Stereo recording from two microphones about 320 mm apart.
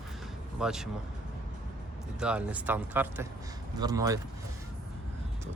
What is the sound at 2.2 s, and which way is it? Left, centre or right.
Speech, centre.